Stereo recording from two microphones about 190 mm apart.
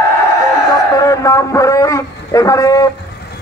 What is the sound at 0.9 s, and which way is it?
A man's voice, 15° left (ahead or behind).